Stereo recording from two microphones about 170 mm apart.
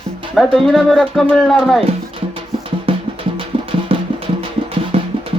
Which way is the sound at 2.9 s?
30° right (ahead or behind).